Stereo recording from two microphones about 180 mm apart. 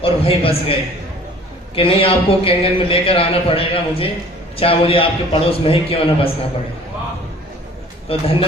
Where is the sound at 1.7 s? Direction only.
30° left (ahead or behind).